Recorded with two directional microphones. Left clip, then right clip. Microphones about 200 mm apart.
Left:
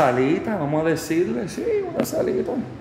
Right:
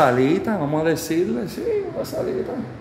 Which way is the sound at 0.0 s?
10° right (ahead or behind).